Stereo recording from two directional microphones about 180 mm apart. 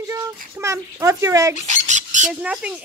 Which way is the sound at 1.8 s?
45° right (ahead or behind).